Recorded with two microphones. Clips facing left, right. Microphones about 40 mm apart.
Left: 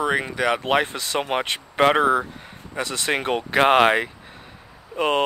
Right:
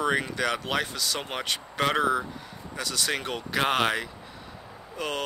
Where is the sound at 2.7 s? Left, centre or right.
Left.